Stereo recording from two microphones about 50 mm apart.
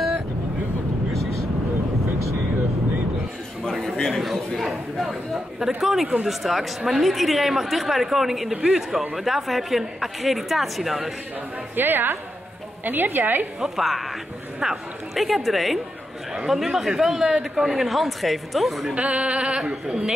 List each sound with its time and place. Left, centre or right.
3.6 s a sound: centre
5.8 s a man's voice: centre
11.7 s a woman's voice: right
13.6 s a man's voice: centre
18.9 s speech: right